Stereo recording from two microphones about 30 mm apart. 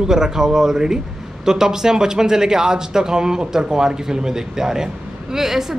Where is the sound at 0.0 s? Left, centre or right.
Centre.